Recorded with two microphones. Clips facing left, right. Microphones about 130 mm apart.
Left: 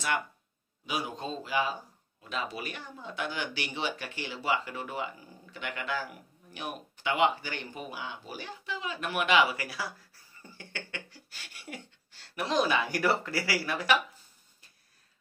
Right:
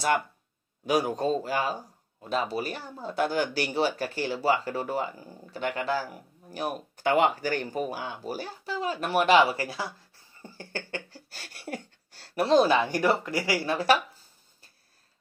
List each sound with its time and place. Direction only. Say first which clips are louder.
0.8 s a man's voice: right 10 dB; 45° right (ahead or behind); by 13.9 s 30° right (ahead or behind)